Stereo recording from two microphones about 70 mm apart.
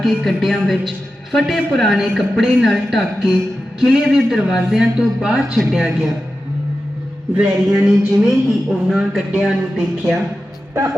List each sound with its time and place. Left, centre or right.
0.0 s speech: centre
7.3 s speech: centre